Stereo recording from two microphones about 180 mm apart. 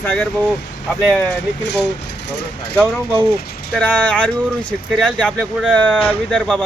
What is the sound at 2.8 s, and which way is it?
Speech, 5° left (ahead or behind).